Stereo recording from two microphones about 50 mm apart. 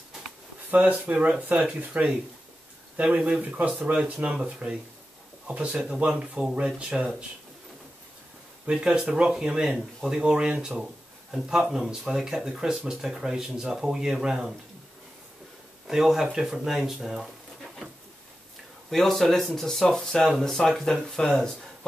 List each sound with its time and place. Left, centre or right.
0.7 s speech: right
8.6 s speech: centre
15.9 s speech: centre
18.9 s speech: centre